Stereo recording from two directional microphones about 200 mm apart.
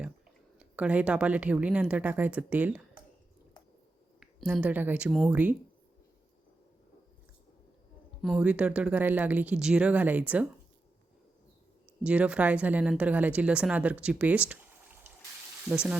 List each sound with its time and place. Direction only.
0.6 s speech: 5° right (ahead or behind)
4.2 s speech: centre (ahead or behind)
8.2 s speech: centre (ahead or behind)
12.0 s speech: 5° right (ahead or behind)